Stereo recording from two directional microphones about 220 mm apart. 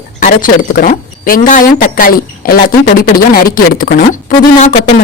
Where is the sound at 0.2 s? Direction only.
40° left (ahead or behind).